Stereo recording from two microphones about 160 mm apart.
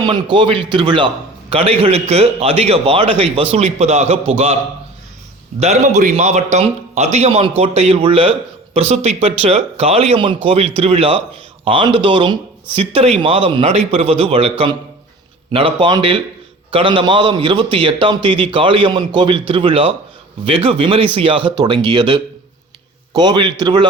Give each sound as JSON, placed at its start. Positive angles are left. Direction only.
{"t": 0.0, "sound": "a man's voice", "side_deg": -30}
{"t": 5.5, "sound": "a man's voice", "side_deg": -45}
{"t": 15.5, "sound": "a man's voice", "side_deg": -35}